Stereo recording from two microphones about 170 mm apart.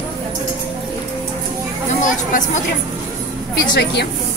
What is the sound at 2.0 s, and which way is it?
Speech, 50° left (ahead or behind).